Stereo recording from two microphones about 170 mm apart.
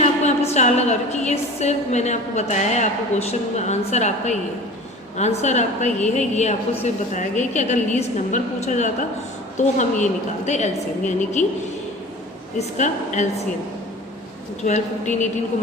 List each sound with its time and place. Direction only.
0.0 s a woman's voice: 40° left (ahead or behind)
12.5 s a woman's voice: 45° left (ahead or behind)
14.6 s a woman's voice: 45° left (ahead or behind)